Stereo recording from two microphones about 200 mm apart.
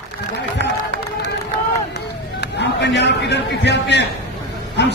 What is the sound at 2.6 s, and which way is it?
A man's voice, 60° left (ahead or behind).